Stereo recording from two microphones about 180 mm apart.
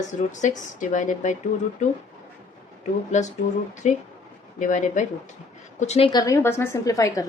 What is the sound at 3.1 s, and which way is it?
A woman's voice, 40° left (ahead or behind).